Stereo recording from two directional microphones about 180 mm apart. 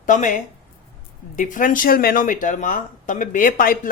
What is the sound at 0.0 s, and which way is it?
Speech, 45° left (ahead or behind).